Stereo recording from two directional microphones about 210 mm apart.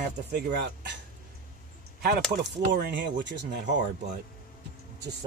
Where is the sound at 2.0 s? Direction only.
45° right (ahead or behind).